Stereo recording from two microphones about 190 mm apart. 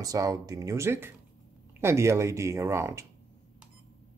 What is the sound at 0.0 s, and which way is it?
Speech, 20° right (ahead or behind).